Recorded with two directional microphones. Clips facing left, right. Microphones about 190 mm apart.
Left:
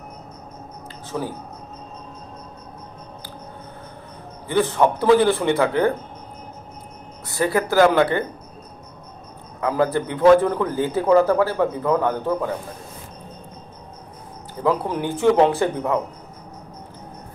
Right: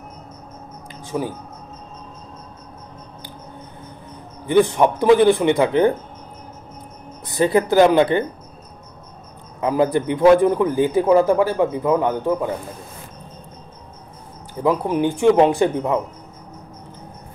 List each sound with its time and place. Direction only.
1.0 s speech: 15° right (ahead or behind)
4.5 s a man's voice: 15° right (ahead or behind)
7.2 s speech: 20° right (ahead or behind)
9.6 s a man's voice: 15° right (ahead or behind)
14.6 s a man's voice: 15° right (ahead or behind)